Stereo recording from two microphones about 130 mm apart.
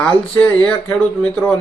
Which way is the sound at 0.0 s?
10° left (ahead or behind).